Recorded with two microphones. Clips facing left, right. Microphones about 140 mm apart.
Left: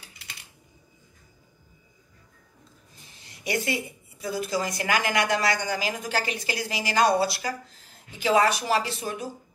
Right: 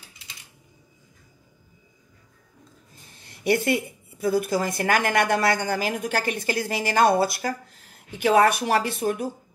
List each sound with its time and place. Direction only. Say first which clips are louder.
0.1 s typing: left 2 dB; 60° left (ahead or behind)
3.3 s a woman's voice: right 6 dB; 55° right (ahead or behind)